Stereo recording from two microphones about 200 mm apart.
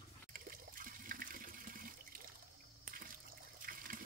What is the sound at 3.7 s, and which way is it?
Water, 45° right (ahead or behind).